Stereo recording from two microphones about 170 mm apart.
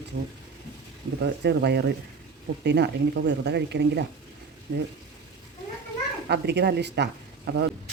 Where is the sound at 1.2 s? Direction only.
75° right (ahead or behind).